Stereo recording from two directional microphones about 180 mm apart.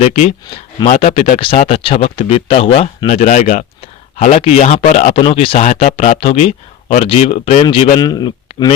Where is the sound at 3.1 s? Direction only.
45° left (ahead or behind); by 8.7 s 25° left (ahead or behind).